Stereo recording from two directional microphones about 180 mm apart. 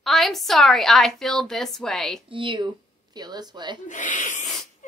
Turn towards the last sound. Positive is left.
turn(degrees=45)  # may be behind; listen again after turning